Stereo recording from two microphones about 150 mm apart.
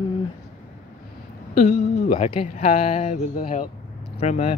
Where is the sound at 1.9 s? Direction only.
90° left.